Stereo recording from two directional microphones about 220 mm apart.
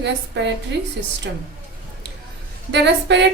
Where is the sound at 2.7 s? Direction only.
55° right (ahead or behind).